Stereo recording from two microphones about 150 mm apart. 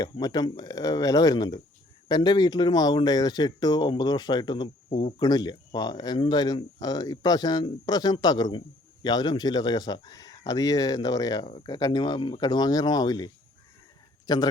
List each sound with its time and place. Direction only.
0.0 s speech: 25° left (ahead or behind)